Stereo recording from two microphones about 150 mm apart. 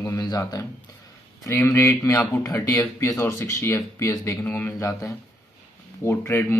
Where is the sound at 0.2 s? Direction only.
25° left (ahead or behind).